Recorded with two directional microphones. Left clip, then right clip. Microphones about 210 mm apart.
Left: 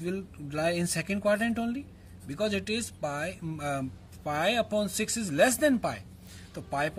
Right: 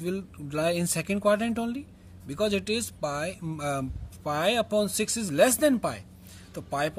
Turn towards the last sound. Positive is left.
turn(degrees=-35)  # may be behind; listen again after turning